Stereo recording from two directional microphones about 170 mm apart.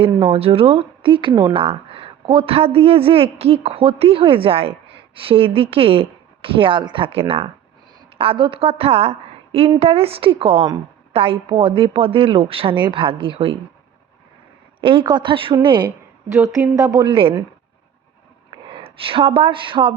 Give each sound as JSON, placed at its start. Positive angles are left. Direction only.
{"t": 0.0, "sound": "a woman's voice", "side_deg": -35}
{"t": 14.8, "sound": "a woman's voice", "side_deg": -30}
{"t": 16.3, "sound": "a woman's voice", "side_deg": -15}
{"t": 18.7, "sound": "speech", "side_deg": -35}